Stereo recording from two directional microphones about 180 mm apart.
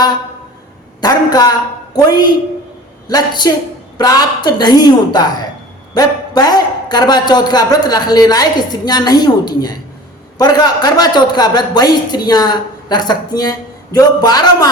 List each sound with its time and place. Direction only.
1.0 s a woman's voice: 20° left (ahead or behind)